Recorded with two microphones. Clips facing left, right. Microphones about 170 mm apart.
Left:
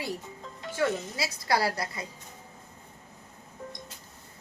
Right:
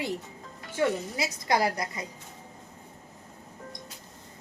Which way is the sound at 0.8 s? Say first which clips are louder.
Right 2 dB; 20° right (ahead or behind).